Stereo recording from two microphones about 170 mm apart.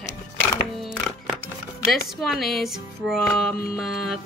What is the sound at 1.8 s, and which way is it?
Speech, centre (ahead or behind).